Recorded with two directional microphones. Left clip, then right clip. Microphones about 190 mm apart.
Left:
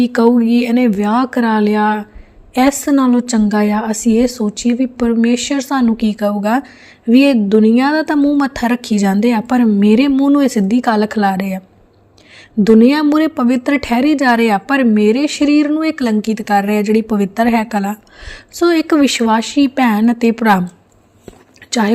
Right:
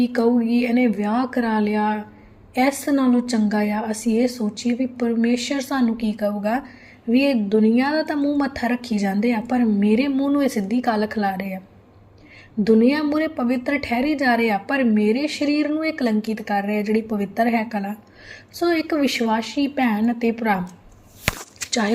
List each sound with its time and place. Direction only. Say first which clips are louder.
0.0 s a woman's voice: left 7 dB; 55° left (ahead or behind)
12.6 s a woman's voice: left 7 dB; 55° left (ahead or behind)
21.7 s speech: left 7 dB; 45° left (ahead or behind)